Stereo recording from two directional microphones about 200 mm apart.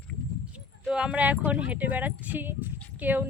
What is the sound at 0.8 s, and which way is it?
Speech, 5° right (ahead or behind).